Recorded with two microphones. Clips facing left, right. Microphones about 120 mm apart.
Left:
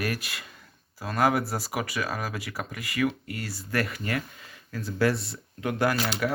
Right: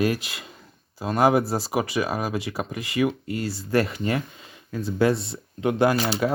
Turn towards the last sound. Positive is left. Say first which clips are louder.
# right 5 dB
turn(degrees=-30)  # may be behind; listen again after turning